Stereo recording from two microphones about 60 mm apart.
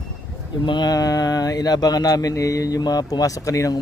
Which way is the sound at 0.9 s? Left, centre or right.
Left.